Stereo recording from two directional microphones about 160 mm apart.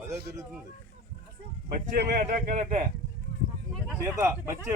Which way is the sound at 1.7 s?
65° right (ahead or behind).